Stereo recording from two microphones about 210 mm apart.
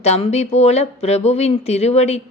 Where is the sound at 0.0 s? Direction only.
30° left (ahead or behind).